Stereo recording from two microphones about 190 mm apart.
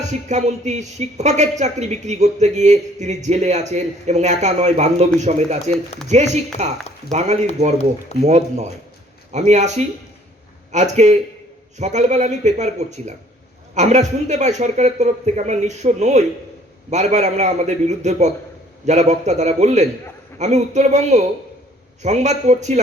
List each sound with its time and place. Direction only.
0.3 s speech: 40° right (ahead or behind)